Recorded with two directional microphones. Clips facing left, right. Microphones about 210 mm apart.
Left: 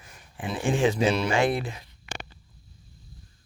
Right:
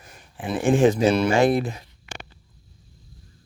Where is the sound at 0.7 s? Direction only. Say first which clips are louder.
Right 6 dB; 45° right (ahead or behind).